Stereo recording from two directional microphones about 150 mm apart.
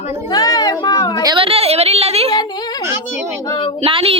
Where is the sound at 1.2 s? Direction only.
30° right (ahead or behind).